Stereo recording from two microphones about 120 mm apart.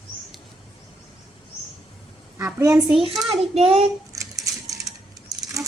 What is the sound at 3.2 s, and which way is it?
Speech, 55° right (ahead or behind).